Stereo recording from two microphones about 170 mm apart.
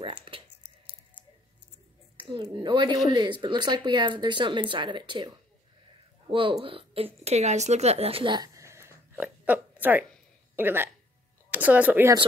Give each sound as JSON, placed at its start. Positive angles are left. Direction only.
{"t": 0.0, "sound": "a sound", "side_deg": -30}
{"t": 2.1, "sound": "a woman's voice", "side_deg": -30}
{"t": 6.3, "sound": "speech", "side_deg": -30}